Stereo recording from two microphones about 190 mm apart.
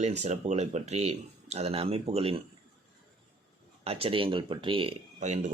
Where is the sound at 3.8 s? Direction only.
30° right (ahead or behind).